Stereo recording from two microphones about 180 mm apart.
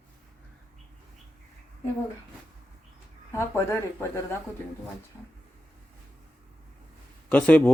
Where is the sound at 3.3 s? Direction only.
15° left (ahead or behind).